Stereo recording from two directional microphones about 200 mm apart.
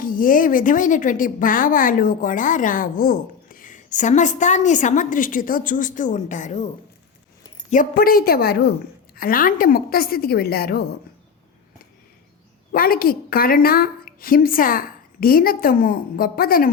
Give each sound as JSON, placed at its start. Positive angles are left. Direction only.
{"t": 0.0, "sound": "a woman's voice", "side_deg": 45}
{"t": 7.7, "sound": "a woman's voice", "side_deg": 45}
{"t": 12.7, "sound": "a woman's voice", "side_deg": 50}